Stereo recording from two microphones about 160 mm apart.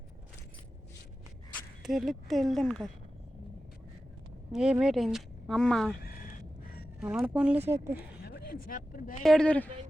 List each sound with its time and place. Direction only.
1.8 s a woman's voice: centre (ahead or behind)
4.5 s a woman's voice: 5° right (ahead or behind)
7.0 s speech: 5° right (ahead or behind)
8.2 s speech: 75° left (ahead or behind); by 9.2 s 60° left (ahead or behind)
9.2 s a woman's voice: 5° left (ahead or behind)